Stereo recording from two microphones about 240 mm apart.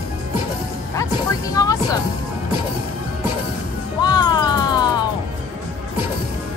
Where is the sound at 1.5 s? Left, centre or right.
Centre.